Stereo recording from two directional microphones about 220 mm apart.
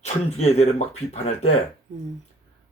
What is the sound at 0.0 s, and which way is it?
Speech, 30° left (ahead or behind).